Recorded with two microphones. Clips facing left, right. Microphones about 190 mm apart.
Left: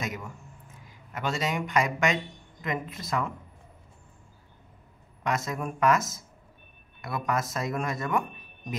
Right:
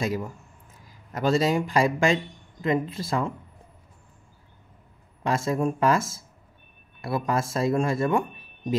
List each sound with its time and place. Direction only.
0.0 s speech: 30° right (ahead or behind)
5.2 s speech: 30° right (ahead or behind)